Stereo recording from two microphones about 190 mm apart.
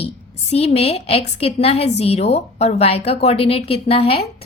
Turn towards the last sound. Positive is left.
turn(degrees=30)  # may be behind; listen again after turning